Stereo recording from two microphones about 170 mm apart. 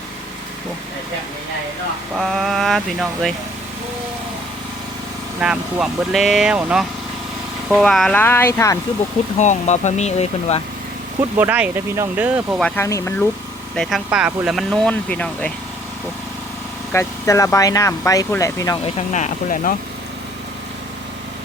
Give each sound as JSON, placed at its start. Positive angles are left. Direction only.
{"t": 2.1, "sound": "speech", "side_deg": 0}
{"t": 5.4, "sound": "speech", "side_deg": -5}
{"t": 9.4, "sound": "speech", "side_deg": 45}
{"t": 11.2, "sound": "speech", "side_deg": -10}
{"t": 12.5, "sound": "speech", "side_deg": 10}
{"t": 13.7, "sound": "speech", "side_deg": -5}
{"t": 16.9, "sound": "speech", "side_deg": 15}
{"t": 18.9, "sound": "speech", "side_deg": 45}